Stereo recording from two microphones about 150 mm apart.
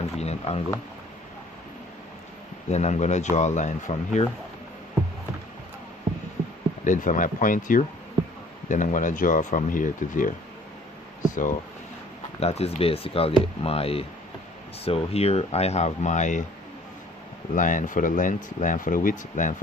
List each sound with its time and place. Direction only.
0.0 s speech: 45° left (ahead or behind)
2.6 s speech: 50° left (ahead or behind)
6.8 s speech: 55° left (ahead or behind)
12.4 s speech: 45° left (ahead or behind)
17.5 s speech: 60° left (ahead or behind)